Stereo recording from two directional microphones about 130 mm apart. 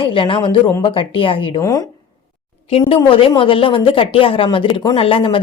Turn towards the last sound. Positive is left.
turn(degrees=45)  # may be behind; listen again after turning